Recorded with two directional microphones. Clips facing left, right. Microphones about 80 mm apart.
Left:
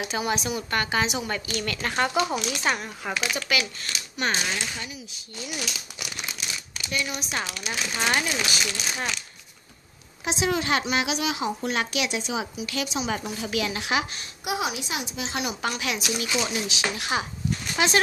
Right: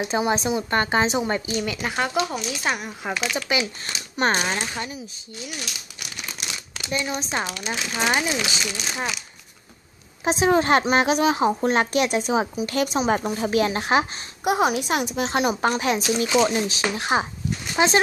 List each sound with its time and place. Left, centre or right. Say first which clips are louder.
0.0 s speech: right 5 dB; right
1.6 s speech: right 1 dB; centre
3.4 s speech: right 2 dB; right
4.2 s a woman's voice: right 5 dB; right
6.9 s speech: right 4 dB; right
7.7 s speech: right 2 dB; centre
10.2 s a woman's voice: right 7 dB; right